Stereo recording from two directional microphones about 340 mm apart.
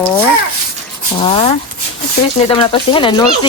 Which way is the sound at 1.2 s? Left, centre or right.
Centre.